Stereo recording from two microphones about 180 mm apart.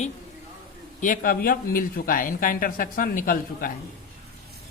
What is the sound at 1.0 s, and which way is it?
Speech, 50° left (ahead or behind).